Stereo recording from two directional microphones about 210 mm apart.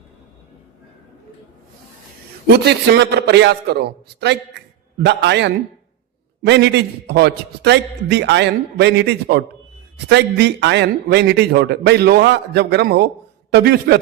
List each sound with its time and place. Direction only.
2.5 s a man's voice: 50° right (ahead or behind)